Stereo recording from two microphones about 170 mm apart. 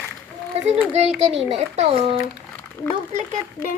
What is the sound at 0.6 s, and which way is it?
A child's voice, 40° right (ahead or behind).